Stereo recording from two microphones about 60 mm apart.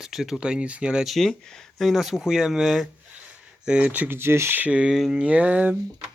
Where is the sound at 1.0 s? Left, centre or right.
Centre.